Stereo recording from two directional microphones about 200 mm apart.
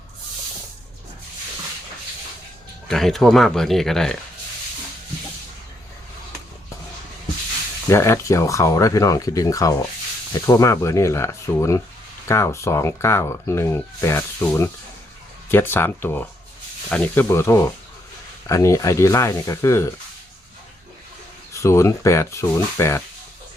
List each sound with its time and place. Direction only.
2.9 s speech: centre (ahead or behind)
7.9 s speech: 15° left (ahead or behind)
21.5 s speech: 15° left (ahead or behind)